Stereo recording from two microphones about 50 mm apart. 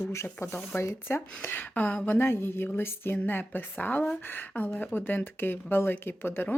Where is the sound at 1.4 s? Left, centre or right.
Left.